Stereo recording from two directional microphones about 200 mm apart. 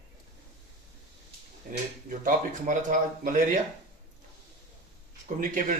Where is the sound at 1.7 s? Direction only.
45° right (ahead or behind).